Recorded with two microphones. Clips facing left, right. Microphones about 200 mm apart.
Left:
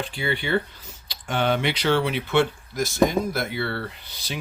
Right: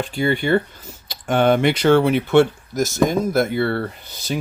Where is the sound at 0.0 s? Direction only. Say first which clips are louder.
Right 7 dB; 45° right (ahead or behind).